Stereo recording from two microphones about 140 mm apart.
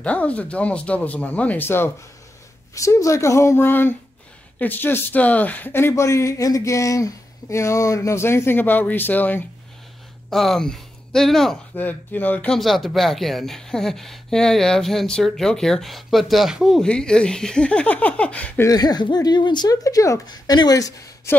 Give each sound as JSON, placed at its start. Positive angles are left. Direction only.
{"t": 0.0, "sound": "speech", "side_deg": 10}
{"t": 10.3, "sound": "speech", "side_deg": 0}
{"t": 11.7, "sound": "speech", "side_deg": 10}
{"t": 18.7, "sound": "speech", "side_deg": 30}